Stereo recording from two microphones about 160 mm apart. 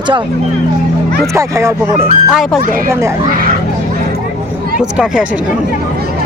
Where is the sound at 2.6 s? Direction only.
60° right (ahead or behind).